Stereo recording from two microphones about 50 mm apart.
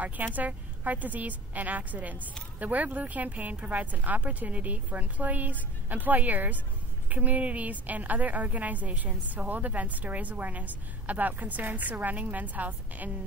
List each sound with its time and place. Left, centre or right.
0.0 s a woman's voice: right